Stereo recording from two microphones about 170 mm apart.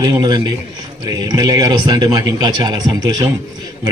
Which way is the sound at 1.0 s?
25° right (ahead or behind).